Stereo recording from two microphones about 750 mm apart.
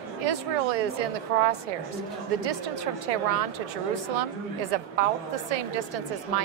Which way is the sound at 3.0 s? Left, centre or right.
Right.